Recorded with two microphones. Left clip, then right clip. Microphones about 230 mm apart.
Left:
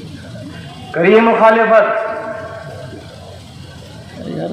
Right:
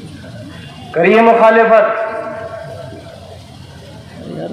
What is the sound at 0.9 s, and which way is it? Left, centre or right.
Speech, right.